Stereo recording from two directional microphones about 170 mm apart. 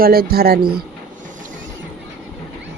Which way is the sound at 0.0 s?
60° right (ahead or behind).